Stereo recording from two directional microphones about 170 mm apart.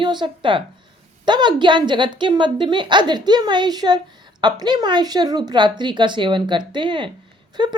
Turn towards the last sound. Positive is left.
turn(degrees=-25)  # may be behind; listen again after turning